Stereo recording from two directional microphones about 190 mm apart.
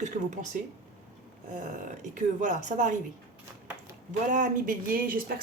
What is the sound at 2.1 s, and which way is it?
Speech, 40° right (ahead or behind).